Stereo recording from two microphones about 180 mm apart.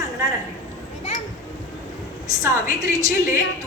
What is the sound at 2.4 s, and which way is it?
Speech, 20° right (ahead or behind).